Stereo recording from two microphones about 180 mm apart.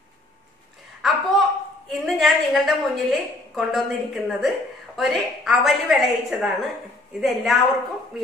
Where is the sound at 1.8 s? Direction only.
Centre (ahead or behind).